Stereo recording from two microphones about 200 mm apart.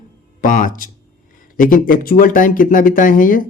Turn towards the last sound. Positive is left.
turn(degrees=45)  # may be behind; listen again after turning